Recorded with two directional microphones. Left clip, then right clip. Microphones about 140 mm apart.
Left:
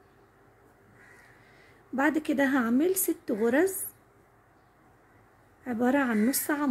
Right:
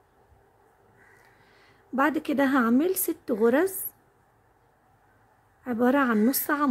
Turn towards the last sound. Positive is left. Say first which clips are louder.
# right 4 dB
turn(degrees=-35)  # may be behind; listen again after turning